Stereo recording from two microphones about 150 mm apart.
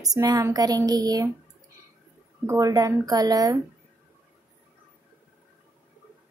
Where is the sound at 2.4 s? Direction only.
20° right (ahead or behind).